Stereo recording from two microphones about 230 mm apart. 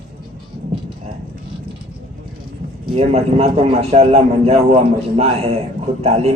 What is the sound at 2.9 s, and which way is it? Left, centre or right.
A man's voice, right.